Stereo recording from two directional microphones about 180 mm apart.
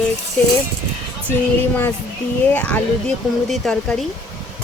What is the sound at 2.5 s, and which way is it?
Speech, 10° left (ahead or behind).